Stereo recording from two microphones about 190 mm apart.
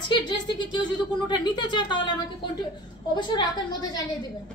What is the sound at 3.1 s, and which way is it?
Speech, 20° left (ahead or behind).